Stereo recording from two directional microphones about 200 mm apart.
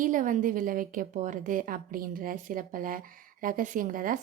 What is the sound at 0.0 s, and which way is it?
A woman's voice, 40° right (ahead or behind).